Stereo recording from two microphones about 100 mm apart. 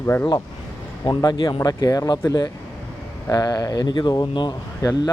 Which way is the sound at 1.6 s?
40° left (ahead or behind).